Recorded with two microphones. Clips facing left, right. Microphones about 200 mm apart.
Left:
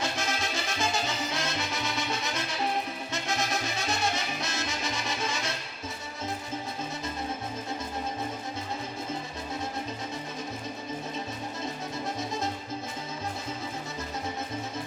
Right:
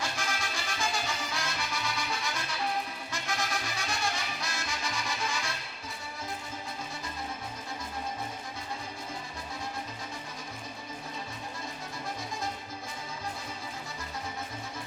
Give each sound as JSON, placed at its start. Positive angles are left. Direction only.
{"t": 0.0, "sound": "music", "side_deg": 20}